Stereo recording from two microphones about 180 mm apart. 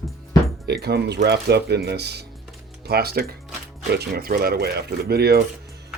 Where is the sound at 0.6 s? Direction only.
65° right (ahead or behind).